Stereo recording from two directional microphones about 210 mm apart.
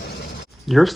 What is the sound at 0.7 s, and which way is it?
Speech, centre (ahead or behind).